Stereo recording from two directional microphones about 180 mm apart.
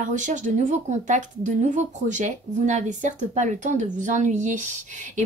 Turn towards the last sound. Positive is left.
turn(degrees=-45)  # may be behind; listen again after turning